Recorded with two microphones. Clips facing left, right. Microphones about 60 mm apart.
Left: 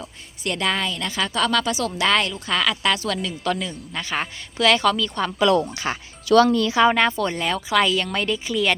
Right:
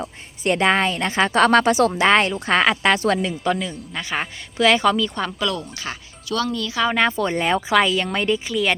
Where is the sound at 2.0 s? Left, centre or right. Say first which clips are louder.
Right 4 dB; right.